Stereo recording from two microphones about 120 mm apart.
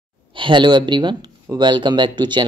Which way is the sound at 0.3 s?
40° right (ahead or behind).